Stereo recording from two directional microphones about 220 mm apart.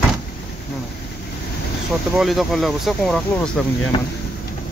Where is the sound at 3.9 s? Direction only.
25° left (ahead or behind).